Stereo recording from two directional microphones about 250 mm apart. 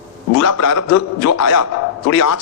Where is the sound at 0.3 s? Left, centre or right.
Left.